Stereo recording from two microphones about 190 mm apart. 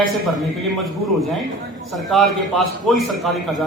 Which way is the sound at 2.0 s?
Centre (ahead or behind).